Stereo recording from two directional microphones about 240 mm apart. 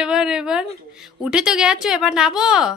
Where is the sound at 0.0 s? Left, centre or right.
Centre.